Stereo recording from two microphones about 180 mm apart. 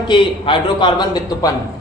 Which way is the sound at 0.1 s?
25° left (ahead or behind).